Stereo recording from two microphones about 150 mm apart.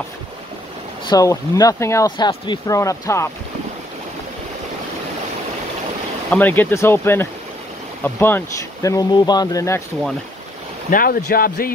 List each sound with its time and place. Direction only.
1.0 s speech: 25° left (ahead or behind)
6.3 s speech: 10° left (ahead or behind)
10.9 s speech: 80° left